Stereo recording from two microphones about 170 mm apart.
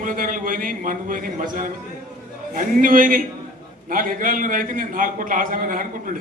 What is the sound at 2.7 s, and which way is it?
A man's voice, 55° right (ahead or behind).